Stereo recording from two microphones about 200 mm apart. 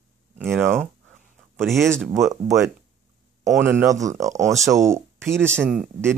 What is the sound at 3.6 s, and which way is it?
Speech, 10° right (ahead or behind).